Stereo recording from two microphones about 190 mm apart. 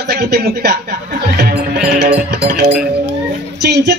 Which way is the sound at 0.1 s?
55° right (ahead or behind).